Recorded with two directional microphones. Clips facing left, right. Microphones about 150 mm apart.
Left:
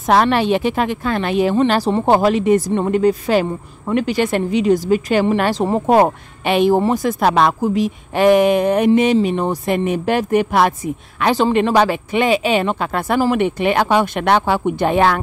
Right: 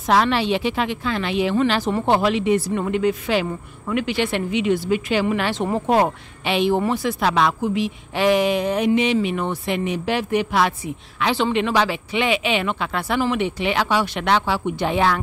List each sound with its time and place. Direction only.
0.0 s speech: 55° left (ahead or behind)
1.7 s speech: 35° left (ahead or behind)
2.1 s speech: 45° left (ahead or behind)
5.9 s speech: 50° left (ahead or behind)